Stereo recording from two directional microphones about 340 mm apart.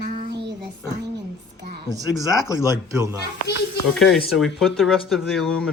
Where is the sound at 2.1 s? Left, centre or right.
Centre.